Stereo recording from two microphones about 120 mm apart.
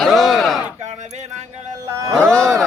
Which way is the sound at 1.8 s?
30° right (ahead or behind).